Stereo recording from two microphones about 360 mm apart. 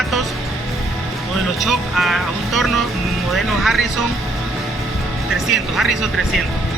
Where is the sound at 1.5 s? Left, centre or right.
Centre.